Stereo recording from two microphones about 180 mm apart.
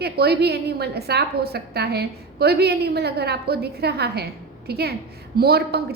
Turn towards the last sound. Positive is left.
turn(degrees=-60)  # may be behind; listen again after turning